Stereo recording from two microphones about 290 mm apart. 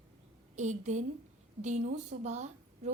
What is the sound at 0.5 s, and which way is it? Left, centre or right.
A woman's voice, right.